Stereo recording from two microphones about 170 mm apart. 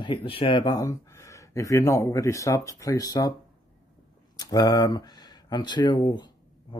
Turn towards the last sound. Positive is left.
turn(degrees=25)  # may be behind; listen again after turning